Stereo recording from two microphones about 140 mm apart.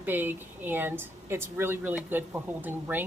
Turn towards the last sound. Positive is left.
turn(degrees=-15)  # may be behind; listen again after turning